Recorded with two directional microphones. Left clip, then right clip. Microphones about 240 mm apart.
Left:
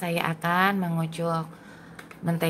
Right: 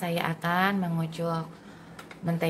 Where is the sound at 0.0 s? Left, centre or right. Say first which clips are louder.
Left 2 dB; centre.